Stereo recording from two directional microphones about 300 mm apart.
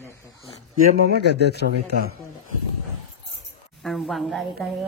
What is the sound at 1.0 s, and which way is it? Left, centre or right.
A man's voice, right.